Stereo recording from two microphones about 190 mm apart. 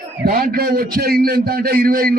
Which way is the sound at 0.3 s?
50° right (ahead or behind).